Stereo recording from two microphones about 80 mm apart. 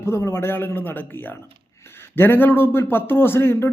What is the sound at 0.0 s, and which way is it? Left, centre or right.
A man's voice, left.